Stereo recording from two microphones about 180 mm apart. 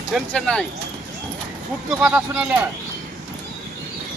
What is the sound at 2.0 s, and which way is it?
Speech, 5° right (ahead or behind).